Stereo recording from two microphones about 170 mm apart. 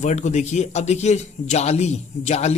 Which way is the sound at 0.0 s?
45° left (ahead or behind).